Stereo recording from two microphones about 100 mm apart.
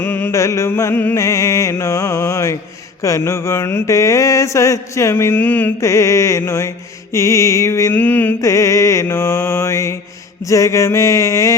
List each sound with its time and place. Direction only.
0.0 s mantra: 25° left (ahead or behind)
8.4 s mantra: 30° left (ahead or behind)
10.4 s a sound: 30° left (ahead or behind)